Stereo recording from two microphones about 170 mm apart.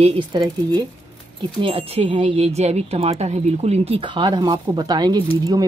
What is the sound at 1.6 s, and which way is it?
Speech, 35° right (ahead or behind).